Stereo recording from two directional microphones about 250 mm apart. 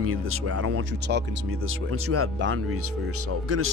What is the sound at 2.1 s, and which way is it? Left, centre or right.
Speech, right.